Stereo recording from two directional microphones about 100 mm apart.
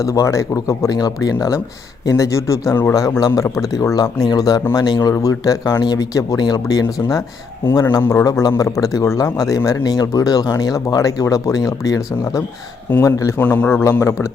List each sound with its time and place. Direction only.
0.0 s speech: 35° left (ahead or behind)
4.9 s speech: 30° left (ahead or behind)
13.4 s speech: 15° left (ahead or behind)
14.0 s speech: 30° left (ahead or behind)